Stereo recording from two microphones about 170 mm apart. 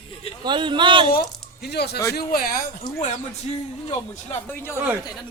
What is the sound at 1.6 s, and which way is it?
Speech, 75° left (ahead or behind).